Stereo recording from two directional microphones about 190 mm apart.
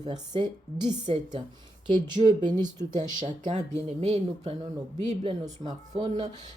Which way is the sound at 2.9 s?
40° right (ahead or behind).